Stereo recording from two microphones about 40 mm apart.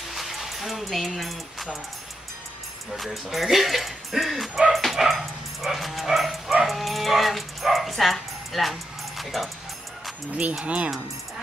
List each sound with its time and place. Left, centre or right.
0.1 s speech: centre
2.9 s speech: centre
4.7 s bow-wow: centre
10.6 s speech: right